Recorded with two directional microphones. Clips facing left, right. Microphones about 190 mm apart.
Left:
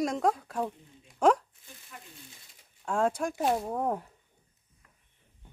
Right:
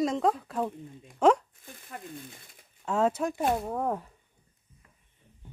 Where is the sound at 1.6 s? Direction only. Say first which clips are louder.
Right 7 dB; 55° right (ahead or behind).